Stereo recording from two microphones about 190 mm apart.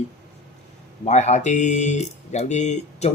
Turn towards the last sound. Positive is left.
turn(degrees=40)  # may be behind; listen again after turning